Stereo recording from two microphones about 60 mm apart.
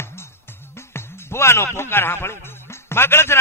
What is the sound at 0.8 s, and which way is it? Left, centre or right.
A man's voice, left.